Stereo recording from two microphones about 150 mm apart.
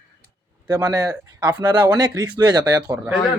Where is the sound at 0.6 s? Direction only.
25° right (ahead or behind).